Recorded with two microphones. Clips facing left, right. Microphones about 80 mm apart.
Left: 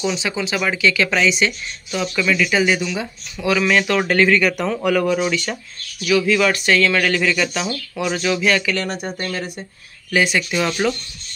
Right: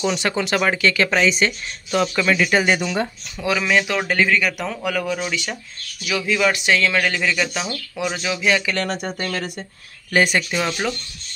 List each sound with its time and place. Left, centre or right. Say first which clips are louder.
0.0 s speech: right 1 dB; right
0.7 s speech: left 3 dB; right
3.3 s speech: left 3 dB; right
3.6 s speech: left 2 dB; centre
5.3 s speech: left 3 dB; centre
9.2 s speech: even; right
10.1 s speech: even; right
10.5 s speech: left 3 dB; centre